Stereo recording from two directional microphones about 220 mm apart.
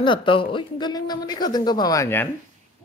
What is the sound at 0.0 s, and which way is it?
Speech, 20° left (ahead or behind).